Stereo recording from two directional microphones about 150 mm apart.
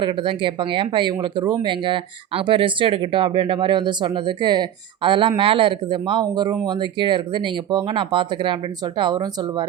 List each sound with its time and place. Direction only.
0.0 s speech: 35° right (ahead or behind)